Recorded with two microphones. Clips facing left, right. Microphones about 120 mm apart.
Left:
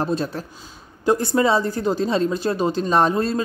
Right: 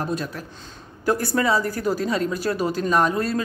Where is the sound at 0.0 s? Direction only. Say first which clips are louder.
Left 4 dB; 30° left (ahead or behind).